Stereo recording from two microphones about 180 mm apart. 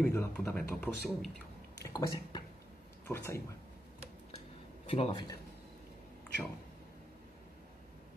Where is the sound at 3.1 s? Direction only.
15° left (ahead or behind).